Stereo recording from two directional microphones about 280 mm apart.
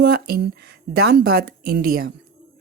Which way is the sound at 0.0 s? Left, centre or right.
Right.